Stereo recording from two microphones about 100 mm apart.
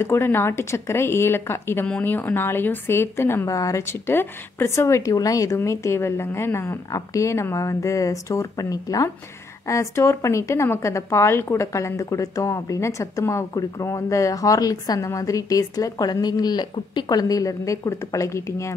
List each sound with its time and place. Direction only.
0.0 s speech: 25° left (ahead or behind)